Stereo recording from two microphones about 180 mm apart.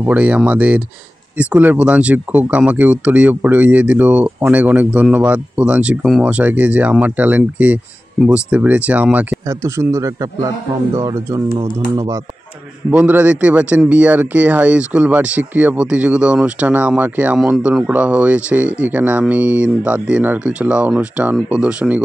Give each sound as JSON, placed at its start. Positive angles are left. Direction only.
{"t": 0.0, "sound": "speech", "side_deg": -5}
{"t": 12.9, "sound": "speech", "side_deg": -10}